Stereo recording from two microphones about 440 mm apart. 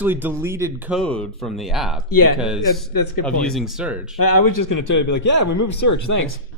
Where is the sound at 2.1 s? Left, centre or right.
Left.